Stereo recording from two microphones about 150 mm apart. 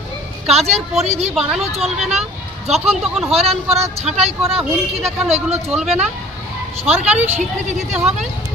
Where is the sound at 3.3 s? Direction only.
45° right (ahead or behind).